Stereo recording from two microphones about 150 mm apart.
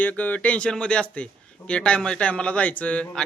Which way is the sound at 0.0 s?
10° left (ahead or behind).